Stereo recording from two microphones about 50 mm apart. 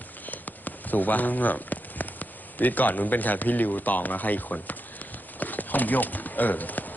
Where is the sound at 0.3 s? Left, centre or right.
Left.